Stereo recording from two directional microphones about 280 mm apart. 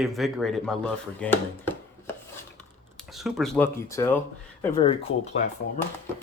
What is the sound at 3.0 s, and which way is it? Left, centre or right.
Speech, centre.